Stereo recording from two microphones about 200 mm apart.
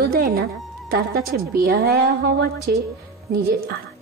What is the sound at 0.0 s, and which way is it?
A woman's voice, 50° right (ahead or behind).